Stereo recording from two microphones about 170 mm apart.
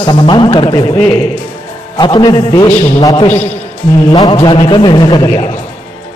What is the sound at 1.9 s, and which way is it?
A man's voice, 25° left (ahead or behind).